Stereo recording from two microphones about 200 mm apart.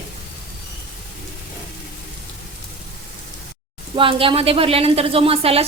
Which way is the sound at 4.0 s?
25° right (ahead or behind).